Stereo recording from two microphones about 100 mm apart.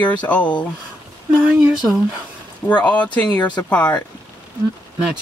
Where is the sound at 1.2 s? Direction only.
10° right (ahead or behind).